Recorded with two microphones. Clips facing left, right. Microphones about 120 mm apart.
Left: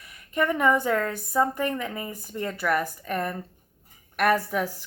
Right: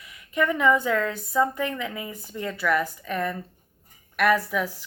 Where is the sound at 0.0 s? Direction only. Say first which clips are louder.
Right 1 dB; 45° left (ahead or behind).